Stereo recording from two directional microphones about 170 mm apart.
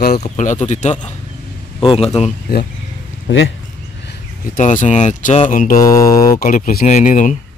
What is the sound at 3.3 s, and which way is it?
Speech, 90° left.